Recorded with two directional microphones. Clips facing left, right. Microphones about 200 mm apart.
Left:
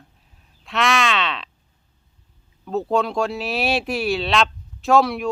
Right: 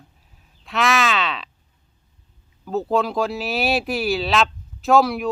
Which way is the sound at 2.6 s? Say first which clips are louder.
Even; centre (ahead or behind).